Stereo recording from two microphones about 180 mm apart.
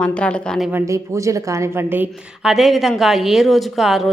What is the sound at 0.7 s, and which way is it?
A woman's voice, 15° right (ahead or behind).